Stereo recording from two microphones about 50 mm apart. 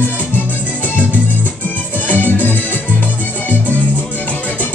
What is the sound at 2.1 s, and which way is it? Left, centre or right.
Music, left.